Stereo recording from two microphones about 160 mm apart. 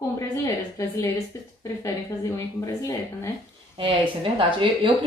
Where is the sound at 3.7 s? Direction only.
35° right (ahead or behind).